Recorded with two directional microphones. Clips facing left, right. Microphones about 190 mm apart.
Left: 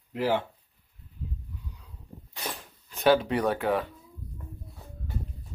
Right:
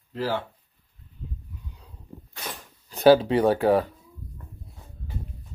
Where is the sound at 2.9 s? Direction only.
35° right (ahead or behind).